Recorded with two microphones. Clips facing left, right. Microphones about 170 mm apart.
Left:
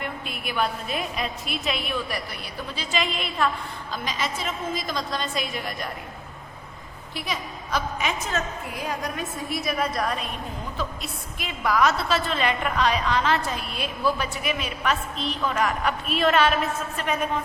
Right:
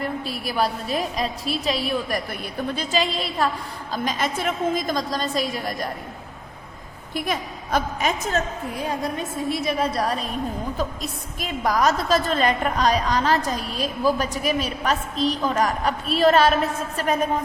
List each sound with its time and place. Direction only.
0.0 s a woman's voice: 35° right (ahead or behind)
2.9 s a woman's voice: 35° right (ahead or behind)
3.9 s a woman's voice: 45° right (ahead or behind)
7.1 s a woman's voice: 50° right (ahead or behind)